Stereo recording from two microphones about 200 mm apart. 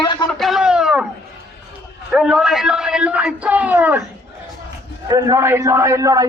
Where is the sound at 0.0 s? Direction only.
25° left (ahead or behind).